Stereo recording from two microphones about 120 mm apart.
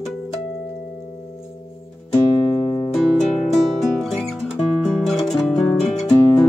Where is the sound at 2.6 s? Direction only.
40° left (ahead or behind).